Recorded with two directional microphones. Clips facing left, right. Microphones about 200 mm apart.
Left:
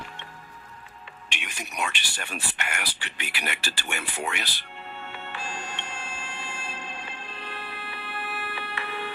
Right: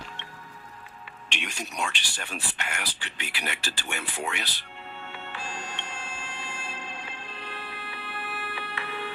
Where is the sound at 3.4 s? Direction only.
65° left (ahead or behind).